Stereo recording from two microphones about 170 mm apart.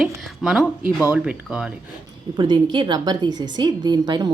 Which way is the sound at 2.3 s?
25° right (ahead or behind).